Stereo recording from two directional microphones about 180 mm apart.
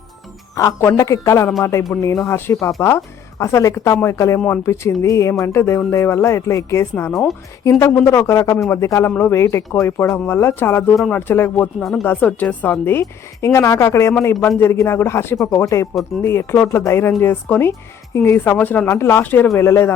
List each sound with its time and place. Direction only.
0.5 s speech: 15° left (ahead or behind)
7.1 s speech: centre (ahead or behind)
7.6 s speech: 15° left (ahead or behind)
11.8 s speech: centre (ahead or behind)